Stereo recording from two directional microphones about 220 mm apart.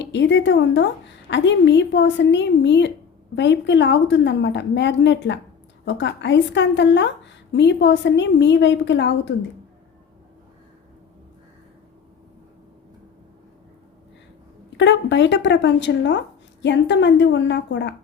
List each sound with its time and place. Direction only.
0.0 s a woman's voice: 55° left (ahead or behind)
14.7 s a woman's voice: 55° left (ahead or behind)